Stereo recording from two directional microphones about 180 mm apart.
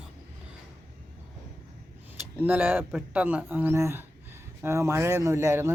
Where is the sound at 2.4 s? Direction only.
10° right (ahead or behind).